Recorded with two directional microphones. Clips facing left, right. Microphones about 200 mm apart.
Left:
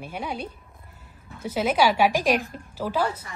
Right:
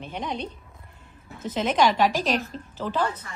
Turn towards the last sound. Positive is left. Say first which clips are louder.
# left 1 dB
turn(degrees=10)  # may be behind; listen again after turning